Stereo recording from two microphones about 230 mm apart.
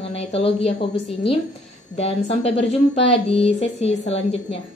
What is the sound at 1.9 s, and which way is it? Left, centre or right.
Speech, left.